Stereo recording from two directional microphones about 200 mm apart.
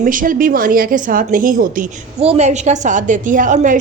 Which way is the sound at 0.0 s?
40° right (ahead or behind).